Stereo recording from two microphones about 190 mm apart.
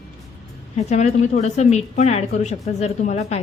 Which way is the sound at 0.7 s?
35° left (ahead or behind).